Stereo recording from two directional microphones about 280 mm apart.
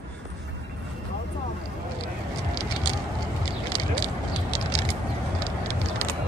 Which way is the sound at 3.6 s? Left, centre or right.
Centre.